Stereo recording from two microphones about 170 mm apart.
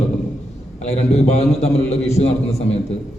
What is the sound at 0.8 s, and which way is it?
A man's voice, 40° left (ahead or behind).